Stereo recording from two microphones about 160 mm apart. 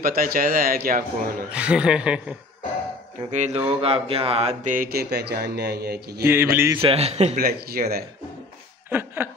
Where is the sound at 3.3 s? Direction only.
45° right (ahead or behind); by 6.2 s 80° right.